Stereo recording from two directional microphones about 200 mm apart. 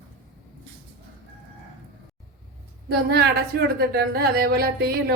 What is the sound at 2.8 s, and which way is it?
A woman's voice, 55° right (ahead or behind).